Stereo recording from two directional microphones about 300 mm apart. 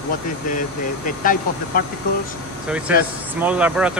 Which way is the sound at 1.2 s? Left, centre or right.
Left.